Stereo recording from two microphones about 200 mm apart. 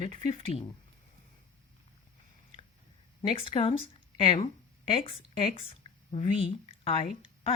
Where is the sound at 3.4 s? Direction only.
25° left (ahead or behind).